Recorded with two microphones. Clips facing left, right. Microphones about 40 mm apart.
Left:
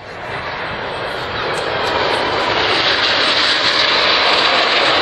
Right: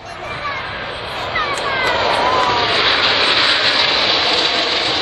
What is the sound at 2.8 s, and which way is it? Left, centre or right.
Vehicle, centre.